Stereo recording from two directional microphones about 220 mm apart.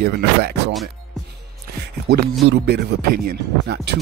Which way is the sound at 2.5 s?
50° right (ahead or behind).